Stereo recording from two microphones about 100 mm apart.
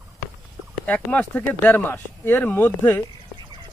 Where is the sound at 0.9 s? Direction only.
15° left (ahead or behind).